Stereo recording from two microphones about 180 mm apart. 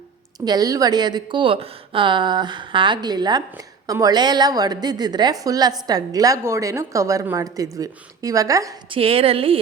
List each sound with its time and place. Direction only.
0.3 s a woman's voice: 20° right (ahead or behind)
9.0 s speech: 30° right (ahead or behind)